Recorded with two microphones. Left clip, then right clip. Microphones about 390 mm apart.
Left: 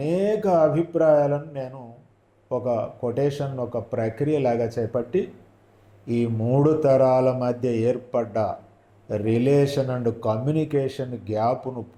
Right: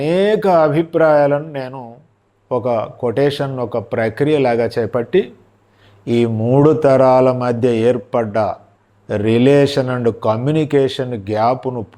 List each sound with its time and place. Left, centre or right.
0.0 s speech: right